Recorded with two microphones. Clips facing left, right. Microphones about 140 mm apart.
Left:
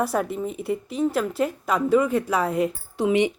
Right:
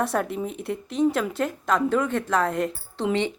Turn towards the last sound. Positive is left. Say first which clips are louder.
# left 4 dB
turn(degrees=10)  # may be behind; listen again after turning